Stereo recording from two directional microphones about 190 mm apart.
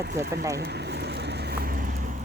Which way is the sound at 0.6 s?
60° right (ahead or behind).